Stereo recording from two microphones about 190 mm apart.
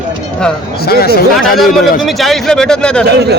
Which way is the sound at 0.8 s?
55° left (ahead or behind).